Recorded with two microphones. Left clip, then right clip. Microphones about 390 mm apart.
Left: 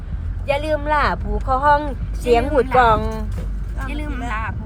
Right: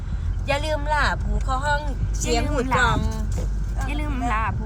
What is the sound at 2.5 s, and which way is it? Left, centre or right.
Speech, centre.